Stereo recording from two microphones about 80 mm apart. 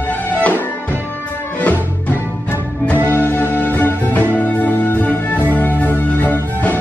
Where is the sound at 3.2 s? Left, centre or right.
Left.